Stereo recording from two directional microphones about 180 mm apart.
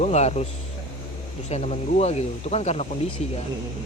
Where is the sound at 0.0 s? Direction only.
35° left (ahead or behind).